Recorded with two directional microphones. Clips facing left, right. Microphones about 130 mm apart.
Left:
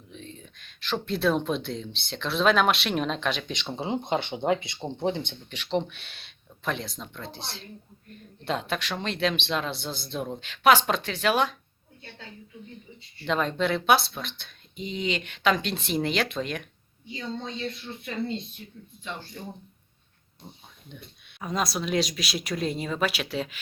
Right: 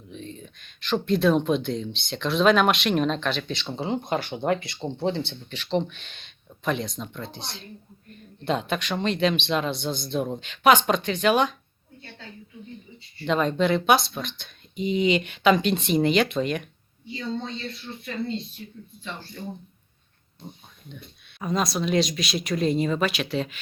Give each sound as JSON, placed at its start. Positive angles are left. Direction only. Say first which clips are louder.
{"t": 0.1, "sound": "speech", "louder": "right 5 dB", "side_deg": 0}
{"t": 13.2, "sound": "speech", "louder": "right 4 dB", "side_deg": 0}
{"t": 14.8, "sound": "speech", "louder": "right 8 dB", "side_deg": -10}
{"t": 17.1, "sound": "speech", "louder": "right 3 dB", "side_deg": 10}
{"t": 19.0, "sound": "speech", "louder": "even", "side_deg": 15}
{"t": 20.9, "sound": "speech", "louder": "right 2 dB", "side_deg": 5}